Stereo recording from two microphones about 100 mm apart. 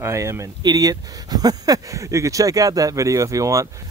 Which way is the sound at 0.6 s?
40° right (ahead or behind).